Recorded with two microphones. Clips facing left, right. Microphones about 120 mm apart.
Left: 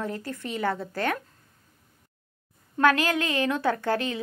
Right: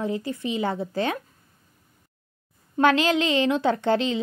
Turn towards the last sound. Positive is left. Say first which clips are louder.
# right 4 dB
turn(degrees=-25)  # may be behind; listen again after turning